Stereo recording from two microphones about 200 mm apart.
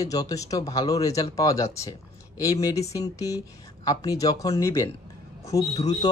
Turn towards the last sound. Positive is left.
turn(degrees=15)  # may be behind; listen again after turning